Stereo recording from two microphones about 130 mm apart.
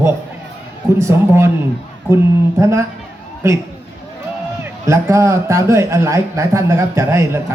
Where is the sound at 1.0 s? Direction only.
20° right (ahead or behind).